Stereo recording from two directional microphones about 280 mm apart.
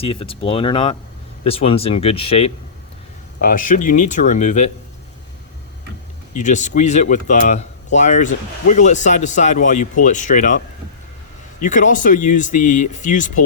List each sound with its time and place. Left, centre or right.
0.0 s speech: left
6.3 s speech: left
11.6 s speech: left